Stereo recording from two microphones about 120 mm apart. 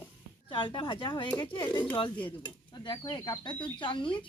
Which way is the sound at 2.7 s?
40° left (ahead or behind).